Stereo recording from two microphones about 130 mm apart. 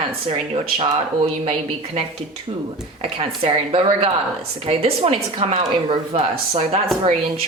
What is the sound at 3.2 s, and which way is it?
Speech, 45° right (ahead or behind).